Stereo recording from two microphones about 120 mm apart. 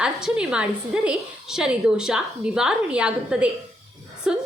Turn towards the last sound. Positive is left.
turn(degrees=-5)  # may be behind; listen again after turning